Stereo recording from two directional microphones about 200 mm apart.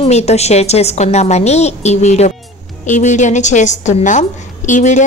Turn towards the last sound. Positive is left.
turn(degrees=35)  # may be behind; listen again after turning